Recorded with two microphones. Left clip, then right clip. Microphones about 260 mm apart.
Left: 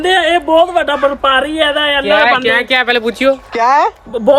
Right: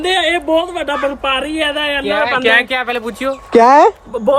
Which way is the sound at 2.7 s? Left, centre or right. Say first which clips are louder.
Left 6 dB; left.